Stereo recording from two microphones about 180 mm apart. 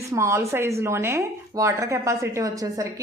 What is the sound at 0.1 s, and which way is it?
A woman's voice, 15° right (ahead or behind).